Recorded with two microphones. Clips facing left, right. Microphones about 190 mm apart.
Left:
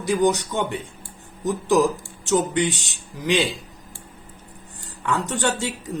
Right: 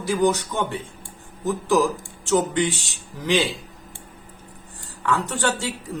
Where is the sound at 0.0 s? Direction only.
15° left (ahead or behind).